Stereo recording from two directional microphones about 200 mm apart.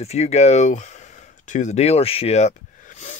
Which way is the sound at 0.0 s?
30° left (ahead or behind).